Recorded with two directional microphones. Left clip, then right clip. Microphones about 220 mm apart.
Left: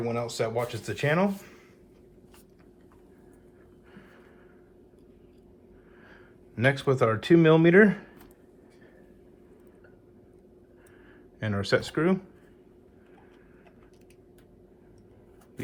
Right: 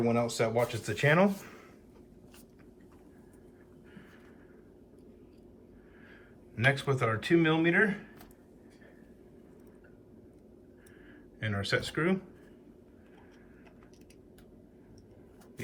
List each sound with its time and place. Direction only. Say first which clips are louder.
0.0 s speech: even; centre (ahead or behind)
6.6 s speech: left 5 dB; 15° left (ahead or behind)
11.3 s speech: left 5 dB; 20° left (ahead or behind)